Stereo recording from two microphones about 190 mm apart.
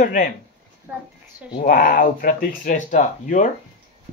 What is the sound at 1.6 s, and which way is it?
Speech, 50° left (ahead or behind).